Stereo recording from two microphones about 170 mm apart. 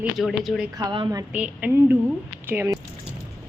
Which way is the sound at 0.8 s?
25° right (ahead or behind).